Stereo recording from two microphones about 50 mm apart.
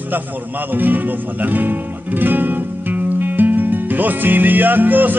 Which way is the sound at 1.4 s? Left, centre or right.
Right.